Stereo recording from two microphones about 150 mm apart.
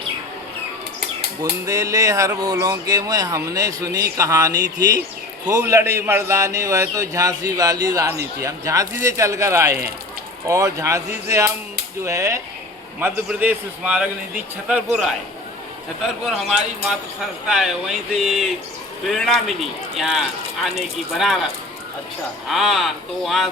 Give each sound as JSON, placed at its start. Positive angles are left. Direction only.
{"t": 1.4, "sound": "speech", "side_deg": -20}
{"t": 13.2, "sound": "a man's voice", "side_deg": -10}
{"t": 16.2, "sound": "speech", "side_deg": 0}